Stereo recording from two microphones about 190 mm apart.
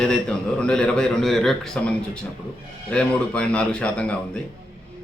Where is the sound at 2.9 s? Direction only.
5° left (ahead or behind).